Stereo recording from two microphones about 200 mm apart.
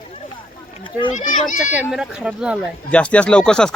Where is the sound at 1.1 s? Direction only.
40° left (ahead or behind).